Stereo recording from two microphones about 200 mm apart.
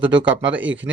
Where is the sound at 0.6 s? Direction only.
65° right (ahead or behind).